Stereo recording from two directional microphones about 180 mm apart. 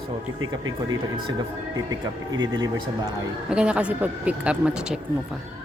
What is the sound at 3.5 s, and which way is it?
Speech, 5° right (ahead or behind).